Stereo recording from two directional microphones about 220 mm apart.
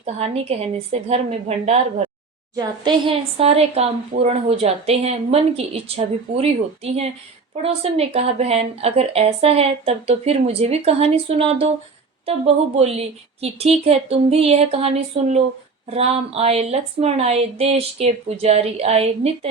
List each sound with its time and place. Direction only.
0.0 s speech: 30° right (ahead or behind)
7.5 s speech: 25° right (ahead or behind)